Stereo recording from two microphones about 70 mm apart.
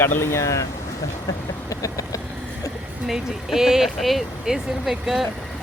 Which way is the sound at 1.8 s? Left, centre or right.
Left.